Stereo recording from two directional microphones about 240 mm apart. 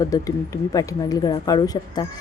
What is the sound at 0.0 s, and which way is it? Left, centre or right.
Speech, centre.